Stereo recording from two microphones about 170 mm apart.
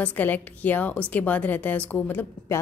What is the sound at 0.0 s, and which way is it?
A woman's voice, 10° left (ahead or behind).